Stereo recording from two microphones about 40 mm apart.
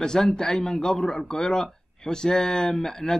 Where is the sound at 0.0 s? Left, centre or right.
Centre.